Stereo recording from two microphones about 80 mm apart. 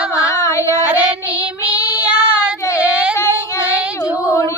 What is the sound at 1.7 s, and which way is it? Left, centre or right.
Child singing, centre.